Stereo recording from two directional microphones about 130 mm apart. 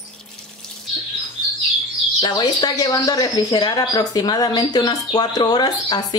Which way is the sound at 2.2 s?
30° left (ahead or behind).